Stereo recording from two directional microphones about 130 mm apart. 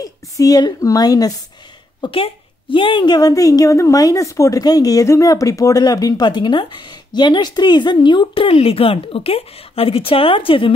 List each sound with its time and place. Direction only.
0.0 s a woman's voice: 30° left (ahead or behind)
2.0 s a woman's voice: 45° left (ahead or behind)